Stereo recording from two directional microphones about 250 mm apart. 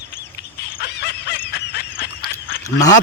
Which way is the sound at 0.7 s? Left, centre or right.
Left.